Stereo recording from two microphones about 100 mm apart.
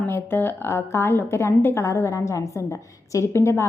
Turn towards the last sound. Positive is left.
turn(degrees=25)  # may be behind; listen again after turning